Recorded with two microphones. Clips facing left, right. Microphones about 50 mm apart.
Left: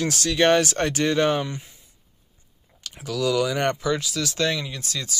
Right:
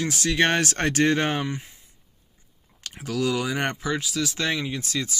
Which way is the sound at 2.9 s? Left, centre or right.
Right.